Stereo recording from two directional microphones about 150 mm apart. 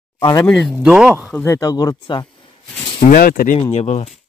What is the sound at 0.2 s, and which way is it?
Speech, 25° left (ahead or behind).